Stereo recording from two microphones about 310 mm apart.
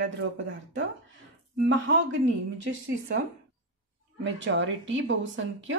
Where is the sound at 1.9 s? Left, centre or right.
Right.